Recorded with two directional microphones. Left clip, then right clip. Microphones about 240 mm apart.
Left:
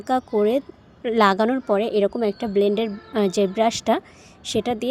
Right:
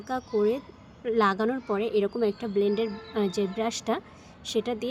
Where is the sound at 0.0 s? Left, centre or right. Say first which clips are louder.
Left 6 dB; left.